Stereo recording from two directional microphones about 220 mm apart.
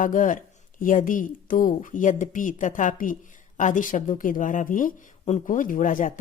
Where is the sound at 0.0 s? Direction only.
35° left (ahead or behind).